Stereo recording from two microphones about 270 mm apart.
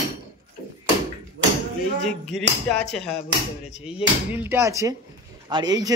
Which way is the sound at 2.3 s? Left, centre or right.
Centre.